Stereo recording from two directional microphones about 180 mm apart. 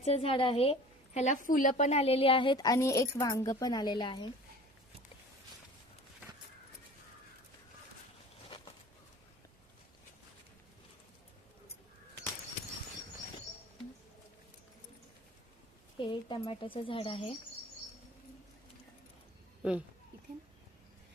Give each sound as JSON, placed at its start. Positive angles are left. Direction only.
{"t": 0.0, "sound": "a woman's voice", "side_deg": 35}
{"t": 16.0, "sound": "a woman's voice", "side_deg": 25}